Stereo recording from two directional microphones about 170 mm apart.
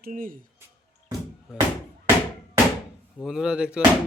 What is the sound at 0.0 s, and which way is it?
Speech, 55° right (ahead or behind).